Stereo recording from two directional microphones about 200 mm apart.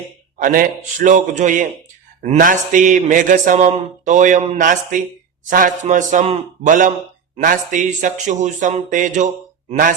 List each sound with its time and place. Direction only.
0.4 s a man's voice: 40° right (ahead or behind)